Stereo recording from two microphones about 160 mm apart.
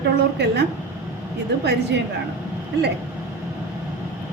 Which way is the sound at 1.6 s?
90° right.